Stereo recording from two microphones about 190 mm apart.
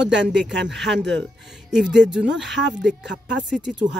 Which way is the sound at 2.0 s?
5° right (ahead or behind).